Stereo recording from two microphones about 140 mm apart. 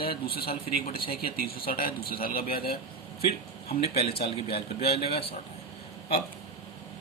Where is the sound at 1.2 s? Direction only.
90° left.